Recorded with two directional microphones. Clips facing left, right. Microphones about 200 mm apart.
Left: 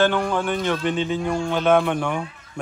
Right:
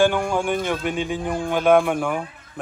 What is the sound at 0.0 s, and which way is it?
Speech, 15° right (ahead or behind).